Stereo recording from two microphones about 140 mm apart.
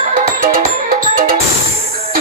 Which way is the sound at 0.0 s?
75° right (ahead or behind).